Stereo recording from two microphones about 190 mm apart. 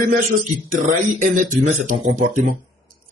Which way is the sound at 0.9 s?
40° right (ahead or behind).